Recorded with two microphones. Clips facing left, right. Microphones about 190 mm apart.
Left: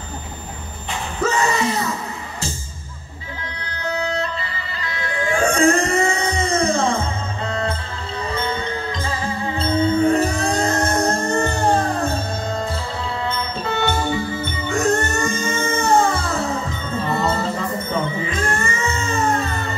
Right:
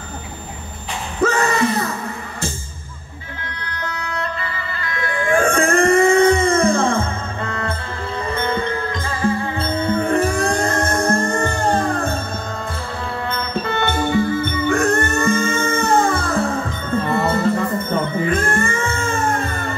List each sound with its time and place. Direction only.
1.2 s a sound: 55° right (ahead or behind)
3.7 s music: 55° right (ahead or behind)
8.3 s music: 55° right (ahead or behind)
13.3 s music: 55° right (ahead or behind)